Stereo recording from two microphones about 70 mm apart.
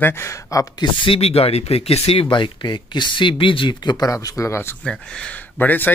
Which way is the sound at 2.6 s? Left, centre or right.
Left.